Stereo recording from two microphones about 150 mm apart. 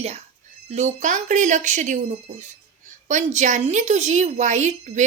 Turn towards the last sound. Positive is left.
turn(degrees=-50)  # may be behind; listen again after turning